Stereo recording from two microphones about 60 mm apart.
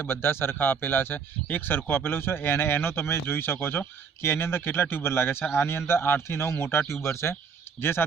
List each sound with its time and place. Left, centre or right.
0.0 s a man's voice: left